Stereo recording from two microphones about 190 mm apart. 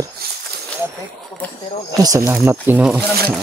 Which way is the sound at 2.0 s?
15° right (ahead or behind).